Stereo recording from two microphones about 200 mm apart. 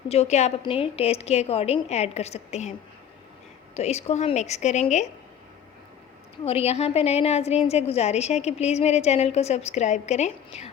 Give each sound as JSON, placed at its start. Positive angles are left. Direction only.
{"t": 0.1, "sound": "a woman's voice", "side_deg": 30}
{"t": 3.8, "sound": "a woman's voice", "side_deg": 30}
{"t": 6.4, "sound": "a woman's voice", "side_deg": 30}